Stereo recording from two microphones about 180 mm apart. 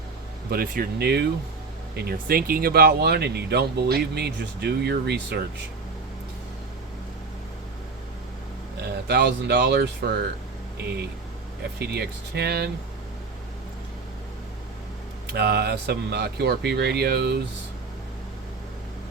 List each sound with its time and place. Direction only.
0.5 s speech: 55° right (ahead or behind)
9.0 s speech: 70° right (ahead or behind)
11.8 s speech: 65° right (ahead or behind)
15.3 s speech: 65° right (ahead or behind)